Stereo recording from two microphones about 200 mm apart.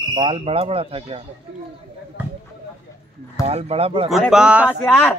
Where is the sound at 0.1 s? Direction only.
25° right (ahead or behind).